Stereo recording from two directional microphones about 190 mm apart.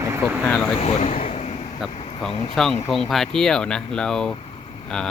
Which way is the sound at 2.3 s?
30° left (ahead or behind).